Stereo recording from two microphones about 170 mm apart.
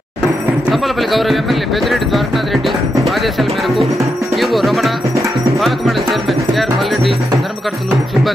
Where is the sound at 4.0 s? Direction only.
20° right (ahead or behind).